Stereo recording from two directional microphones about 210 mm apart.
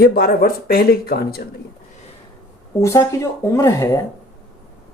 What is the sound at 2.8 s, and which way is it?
Speech, 15° left (ahead or behind).